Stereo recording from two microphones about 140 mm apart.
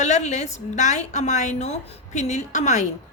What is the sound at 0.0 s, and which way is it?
A woman's voice, 55° left (ahead or behind).